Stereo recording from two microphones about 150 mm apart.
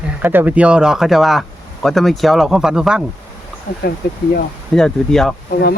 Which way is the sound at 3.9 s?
90° left.